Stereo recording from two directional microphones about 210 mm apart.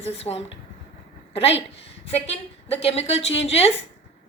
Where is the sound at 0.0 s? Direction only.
30° left (ahead or behind).